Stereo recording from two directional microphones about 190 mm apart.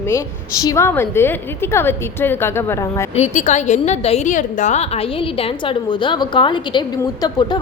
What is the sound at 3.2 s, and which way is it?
A woman's voice, 40° left (ahead or behind).